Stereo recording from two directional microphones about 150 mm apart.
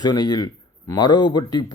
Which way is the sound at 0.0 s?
25° left (ahead or behind).